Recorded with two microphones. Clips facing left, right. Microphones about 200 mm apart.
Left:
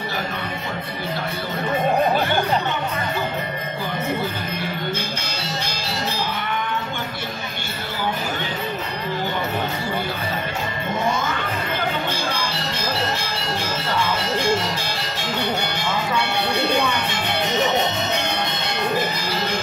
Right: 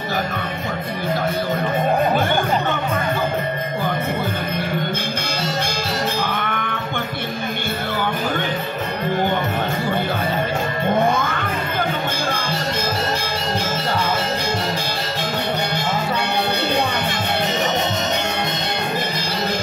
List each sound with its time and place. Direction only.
6.2 s music: 55° right (ahead or behind)
11.0 s music: 55° right (ahead or behind)